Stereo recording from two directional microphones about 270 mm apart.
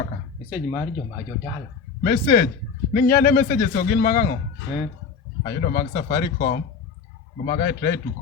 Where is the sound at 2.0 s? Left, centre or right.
Left.